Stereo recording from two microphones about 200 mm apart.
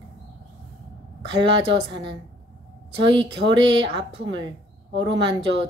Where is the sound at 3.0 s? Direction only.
25° right (ahead or behind).